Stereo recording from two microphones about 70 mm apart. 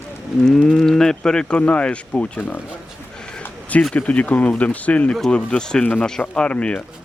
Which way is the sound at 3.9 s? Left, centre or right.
Centre.